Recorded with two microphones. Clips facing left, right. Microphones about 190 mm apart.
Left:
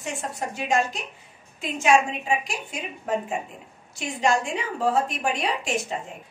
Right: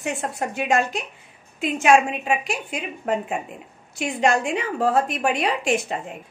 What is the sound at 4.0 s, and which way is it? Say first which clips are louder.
A woman's voice: right 3 dB; 60° right (ahead or behind).